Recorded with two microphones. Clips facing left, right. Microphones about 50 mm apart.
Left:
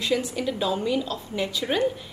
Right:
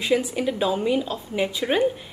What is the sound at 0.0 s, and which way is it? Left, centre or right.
A woman's voice, centre.